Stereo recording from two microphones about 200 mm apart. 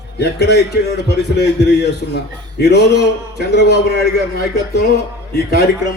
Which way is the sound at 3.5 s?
55° left (ahead or behind).